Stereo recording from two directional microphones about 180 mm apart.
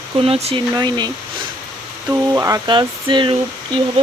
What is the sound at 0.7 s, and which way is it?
Speech, 25° right (ahead or behind).